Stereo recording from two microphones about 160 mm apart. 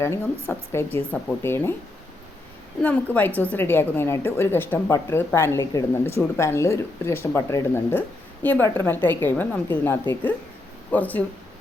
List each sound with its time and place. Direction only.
0.0 s a woman's voice: 15° left (ahead or behind)
2.8 s a woman's voice: 10° left (ahead or behind)